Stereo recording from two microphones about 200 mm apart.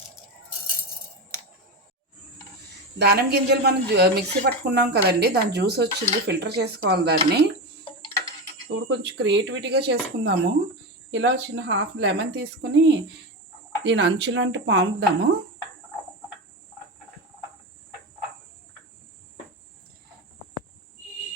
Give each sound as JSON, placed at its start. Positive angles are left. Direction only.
{"t": 3.0, "sound": "speech", "side_deg": -55}
{"t": 7.9, "sound": "tick-tock", "side_deg": 25}
{"t": 8.7, "sound": "speech", "side_deg": -60}